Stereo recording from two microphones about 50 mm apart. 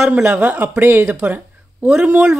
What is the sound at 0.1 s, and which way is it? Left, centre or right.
Speech, right.